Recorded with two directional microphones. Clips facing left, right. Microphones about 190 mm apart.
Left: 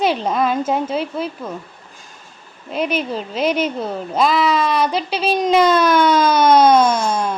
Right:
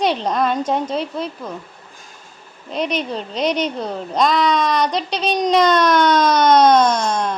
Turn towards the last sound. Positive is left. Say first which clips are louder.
# left 1 dB
turn(degrees=5)  # may be behind; listen again after turning